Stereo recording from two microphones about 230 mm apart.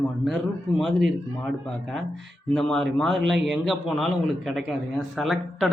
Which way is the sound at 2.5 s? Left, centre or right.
Centre.